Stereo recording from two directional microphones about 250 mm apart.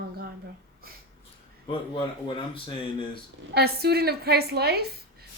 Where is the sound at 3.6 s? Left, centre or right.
Right.